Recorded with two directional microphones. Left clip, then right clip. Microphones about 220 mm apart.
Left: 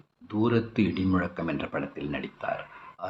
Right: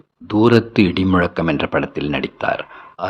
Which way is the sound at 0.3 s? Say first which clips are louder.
Right 13 dB; 45° right (ahead or behind).